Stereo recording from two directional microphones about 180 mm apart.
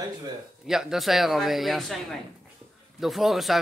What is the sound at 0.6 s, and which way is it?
A man's voice, 5° right (ahead or behind).